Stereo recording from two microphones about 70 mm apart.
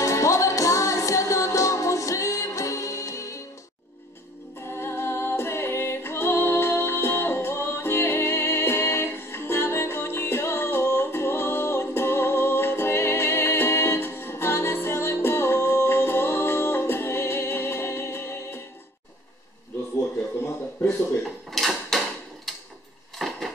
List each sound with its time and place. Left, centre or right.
0.0 s music: left
4.6 s music: left
21.5 s drawer open or close: centre
23.1 s a sound: centre